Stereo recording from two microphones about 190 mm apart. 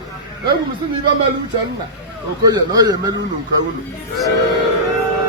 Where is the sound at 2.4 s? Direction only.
20° right (ahead or behind).